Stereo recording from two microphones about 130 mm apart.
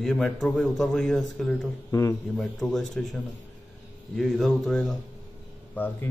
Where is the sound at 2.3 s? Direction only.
Centre (ahead or behind).